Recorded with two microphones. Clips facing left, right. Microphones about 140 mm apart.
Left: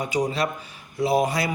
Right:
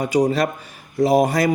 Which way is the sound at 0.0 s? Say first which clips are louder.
Right 6 dB; 45° right (ahead or behind).